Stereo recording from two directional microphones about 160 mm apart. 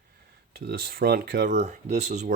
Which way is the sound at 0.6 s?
70° right (ahead or behind).